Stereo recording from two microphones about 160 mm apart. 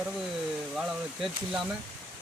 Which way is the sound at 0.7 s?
5° right (ahead or behind).